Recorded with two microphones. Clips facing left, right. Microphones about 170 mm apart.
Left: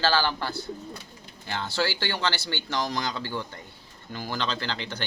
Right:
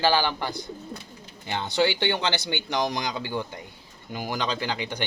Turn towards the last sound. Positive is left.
turn(degrees=-15)  # may be behind; listen again after turning